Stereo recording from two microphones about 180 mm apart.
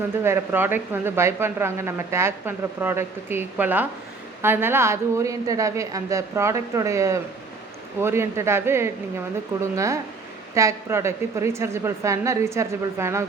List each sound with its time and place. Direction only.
0.2 s speech: 15° right (ahead or behind)